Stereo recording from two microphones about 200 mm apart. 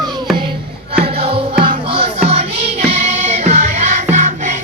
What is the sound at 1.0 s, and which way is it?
Music, 30° right (ahead or behind).